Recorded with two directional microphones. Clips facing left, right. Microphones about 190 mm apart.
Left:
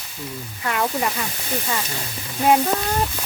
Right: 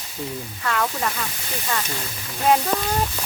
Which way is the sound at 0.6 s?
15° left (ahead or behind).